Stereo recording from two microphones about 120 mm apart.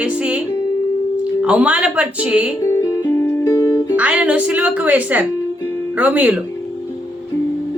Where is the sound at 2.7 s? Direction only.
25° left (ahead or behind).